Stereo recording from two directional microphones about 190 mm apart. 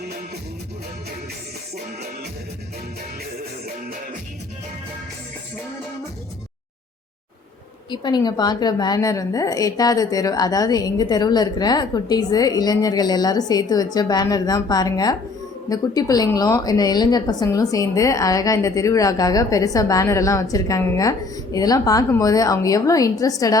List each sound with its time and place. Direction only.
7.9 s a woman's voice: 25° left (ahead or behind)